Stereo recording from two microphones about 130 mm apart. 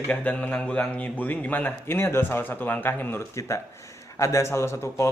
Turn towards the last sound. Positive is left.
turn(degrees=20)  # may be behind; listen again after turning